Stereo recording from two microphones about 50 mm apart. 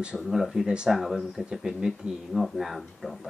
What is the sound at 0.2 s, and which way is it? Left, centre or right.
Speech, centre.